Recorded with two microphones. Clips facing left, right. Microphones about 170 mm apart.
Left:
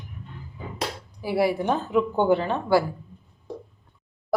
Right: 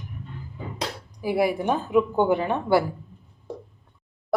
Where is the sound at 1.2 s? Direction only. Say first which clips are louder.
Even; 15° right (ahead or behind).